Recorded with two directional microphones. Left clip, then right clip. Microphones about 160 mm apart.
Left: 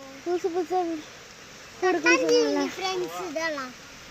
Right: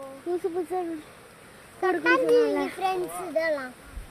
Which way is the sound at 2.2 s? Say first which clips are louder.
Right 1 dB; 45° left (ahead or behind).